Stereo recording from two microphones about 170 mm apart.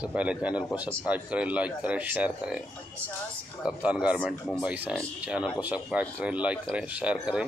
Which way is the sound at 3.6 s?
5° right (ahead or behind).